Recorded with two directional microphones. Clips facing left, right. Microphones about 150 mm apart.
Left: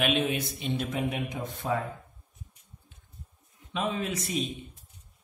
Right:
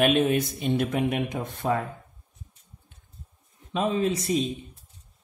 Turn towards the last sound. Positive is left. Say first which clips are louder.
# right 7 dB
turn(degrees=-35)  # may be behind; listen again after turning